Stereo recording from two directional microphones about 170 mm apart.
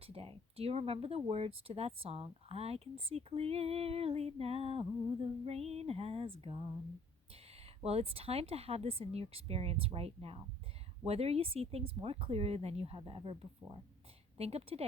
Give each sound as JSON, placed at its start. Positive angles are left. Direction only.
{"t": 0.0, "sound": "speech", "side_deg": -35}
{"t": 7.8, "sound": "speech", "side_deg": -35}